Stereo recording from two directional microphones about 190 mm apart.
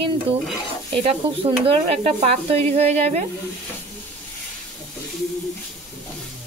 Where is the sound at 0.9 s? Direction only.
30° right (ahead or behind).